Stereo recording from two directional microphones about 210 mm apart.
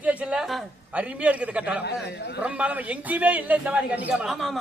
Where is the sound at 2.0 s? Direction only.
50° left (ahead or behind).